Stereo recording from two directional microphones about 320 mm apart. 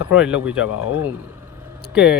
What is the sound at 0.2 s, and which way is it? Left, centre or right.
Speech, centre.